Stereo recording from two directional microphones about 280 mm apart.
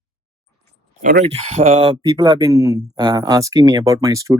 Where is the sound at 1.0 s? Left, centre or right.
Right.